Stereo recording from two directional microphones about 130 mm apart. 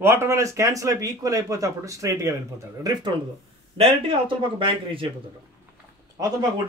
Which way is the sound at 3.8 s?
40° right (ahead or behind).